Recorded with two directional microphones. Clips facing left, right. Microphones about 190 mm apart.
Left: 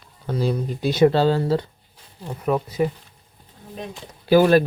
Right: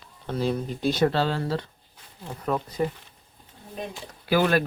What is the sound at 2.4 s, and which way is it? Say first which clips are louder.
Speech: left 5 dB; 10° left (ahead or behind).